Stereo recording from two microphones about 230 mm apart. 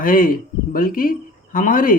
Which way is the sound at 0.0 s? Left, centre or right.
Left.